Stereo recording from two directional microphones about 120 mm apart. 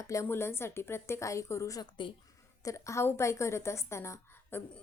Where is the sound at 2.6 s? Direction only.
25° left (ahead or behind).